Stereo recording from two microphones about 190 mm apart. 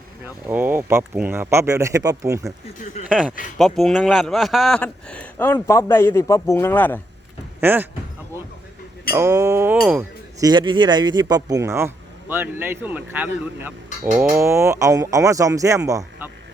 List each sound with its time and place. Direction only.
0.4 s speech: 10° right (ahead or behind)
3.1 s a man's voice: 5° right (ahead or behind)
7.6 s speech: 10° right (ahead or behind)
9.1 s speech: 15° right (ahead or behind)
10.4 s speech: 25° right (ahead or behind)